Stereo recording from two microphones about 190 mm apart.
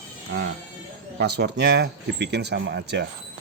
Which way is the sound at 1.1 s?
60° right (ahead or behind).